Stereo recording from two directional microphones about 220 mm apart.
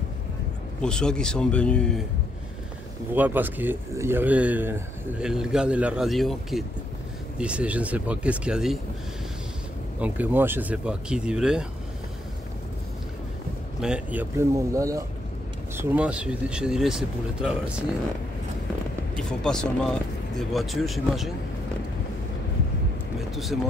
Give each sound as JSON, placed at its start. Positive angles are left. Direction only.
{"t": 0.8, "sound": "speech", "side_deg": 5}
{"t": 3.2, "sound": "speech", "side_deg": -10}
{"t": 9.9, "sound": "speech", "side_deg": -5}
{"t": 13.7, "sound": "speech", "side_deg": -5}
{"t": 19.1, "sound": "speech", "side_deg": 5}
{"t": 23.3, "sound": "speech", "side_deg": 0}